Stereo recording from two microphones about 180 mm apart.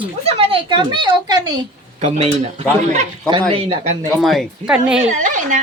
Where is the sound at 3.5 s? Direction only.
35° right (ahead or behind).